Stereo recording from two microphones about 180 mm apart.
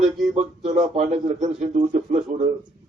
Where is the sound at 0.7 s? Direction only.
30° right (ahead or behind).